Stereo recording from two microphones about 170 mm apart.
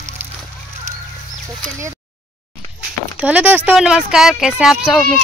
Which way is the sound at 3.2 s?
10° right (ahead or behind).